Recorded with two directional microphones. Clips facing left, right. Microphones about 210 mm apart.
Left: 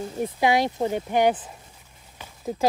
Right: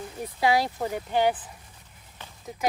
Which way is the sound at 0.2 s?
20° left (ahead or behind).